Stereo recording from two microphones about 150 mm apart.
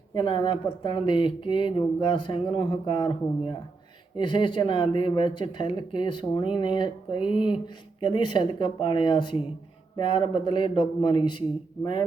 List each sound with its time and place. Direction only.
0.1 s speech: 30° left (ahead or behind)